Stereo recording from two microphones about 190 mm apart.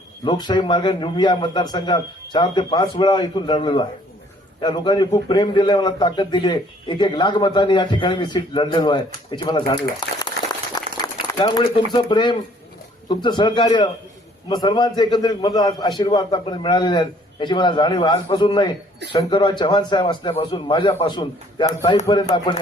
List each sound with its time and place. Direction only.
0.3 s a man's voice: 25° left (ahead or behind)
22.3 s a man's voice: 35° left (ahead or behind)